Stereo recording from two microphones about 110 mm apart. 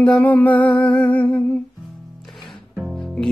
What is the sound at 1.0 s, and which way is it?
Humming, 15° left (ahead or behind).